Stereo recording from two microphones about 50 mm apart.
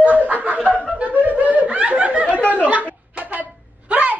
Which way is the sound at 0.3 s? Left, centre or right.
Right.